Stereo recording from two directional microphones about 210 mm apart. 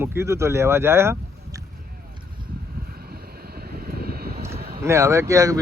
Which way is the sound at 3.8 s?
45° right (ahead or behind).